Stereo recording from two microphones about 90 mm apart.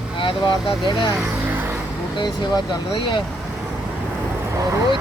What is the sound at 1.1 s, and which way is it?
Vehicle, 20° right (ahead or behind).